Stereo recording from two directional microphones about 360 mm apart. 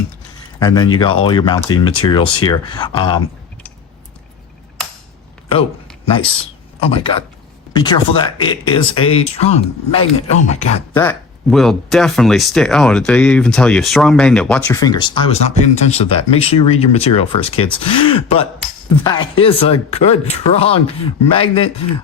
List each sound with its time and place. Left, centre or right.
0.6 s speech: centre
6.7 s speech: centre
10.9 s speech: centre